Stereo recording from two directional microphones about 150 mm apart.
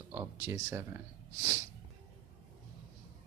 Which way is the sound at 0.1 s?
20° right (ahead or behind).